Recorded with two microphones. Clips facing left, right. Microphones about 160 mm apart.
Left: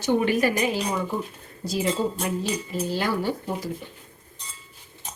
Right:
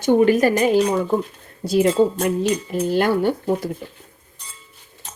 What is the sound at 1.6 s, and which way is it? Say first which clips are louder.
Speech: right 9 dB; 60° right (ahead or behind).